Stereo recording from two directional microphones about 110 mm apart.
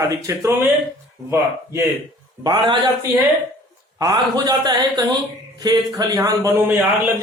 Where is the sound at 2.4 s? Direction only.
45° right (ahead or behind).